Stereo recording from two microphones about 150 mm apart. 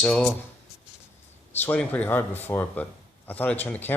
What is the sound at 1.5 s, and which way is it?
Speech, 10° left (ahead or behind).